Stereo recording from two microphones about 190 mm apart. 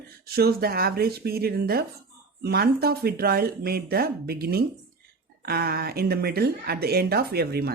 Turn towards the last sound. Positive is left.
turn(degrees=-55)  # may be behind; listen again after turning